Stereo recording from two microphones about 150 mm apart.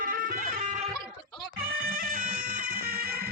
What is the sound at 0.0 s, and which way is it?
Music, 90° right.